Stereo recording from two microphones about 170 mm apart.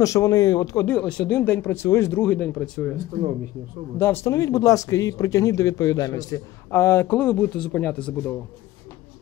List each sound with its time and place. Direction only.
0.0 s speech: 20° left (ahead or behind)
0.8 s speech: 5° left (ahead or behind)
2.2 s speech: 5° left (ahead or behind)
4.0 s speech: 15° left (ahead or behind)